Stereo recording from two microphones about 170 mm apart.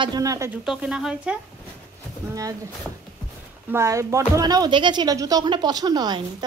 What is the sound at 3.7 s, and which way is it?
Speech, 15° right (ahead or behind).